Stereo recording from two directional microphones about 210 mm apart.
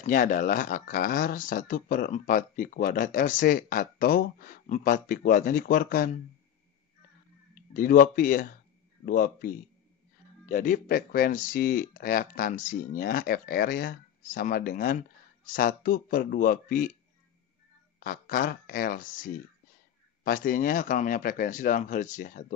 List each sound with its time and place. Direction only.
0.0 s speech: 40° left (ahead or behind)
7.7 s speech: 40° left (ahead or behind)
10.5 s speech: 40° left (ahead or behind)
17.9 s speech: 40° left (ahead or behind)